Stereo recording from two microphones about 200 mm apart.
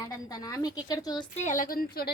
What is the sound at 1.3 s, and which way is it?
Speech, 40° left (ahead or behind).